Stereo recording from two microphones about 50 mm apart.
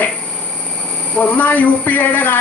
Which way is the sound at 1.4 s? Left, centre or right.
Left.